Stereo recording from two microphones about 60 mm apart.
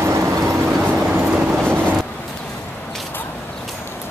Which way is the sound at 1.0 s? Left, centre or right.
Centre.